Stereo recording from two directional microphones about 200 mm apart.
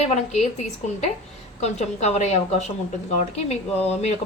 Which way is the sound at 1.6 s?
35° left (ahead or behind).